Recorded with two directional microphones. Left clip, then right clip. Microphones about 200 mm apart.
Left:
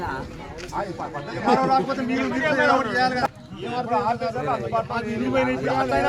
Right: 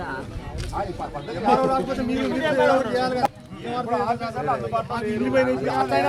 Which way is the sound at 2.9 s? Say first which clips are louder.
Left 2 dB; 20° right (ahead or behind).